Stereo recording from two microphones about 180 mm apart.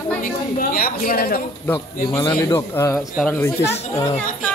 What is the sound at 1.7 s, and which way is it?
Speech, 30° left (ahead or behind).